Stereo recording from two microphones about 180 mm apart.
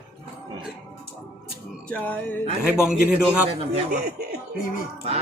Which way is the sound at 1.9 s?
10° left (ahead or behind).